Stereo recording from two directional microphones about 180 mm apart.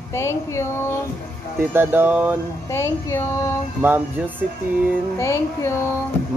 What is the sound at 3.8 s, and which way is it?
Speech, 10° right (ahead or behind).